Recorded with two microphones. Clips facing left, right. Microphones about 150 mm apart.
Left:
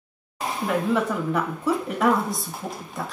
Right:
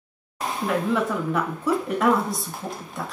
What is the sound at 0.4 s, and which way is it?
Speech, centre (ahead or behind).